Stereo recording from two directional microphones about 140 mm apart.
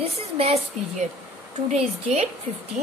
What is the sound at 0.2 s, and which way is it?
A woman's voice, 45° right (ahead or behind).